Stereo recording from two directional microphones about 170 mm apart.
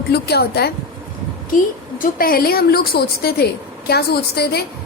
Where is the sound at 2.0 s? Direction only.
60° left (ahead or behind).